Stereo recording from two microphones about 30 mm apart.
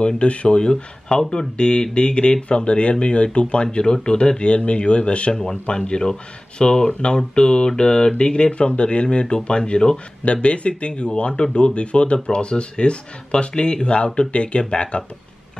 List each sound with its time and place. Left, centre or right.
0.0 s speech: left
0.6 s speech: left
3.6 s speech: left
5.3 s speech: left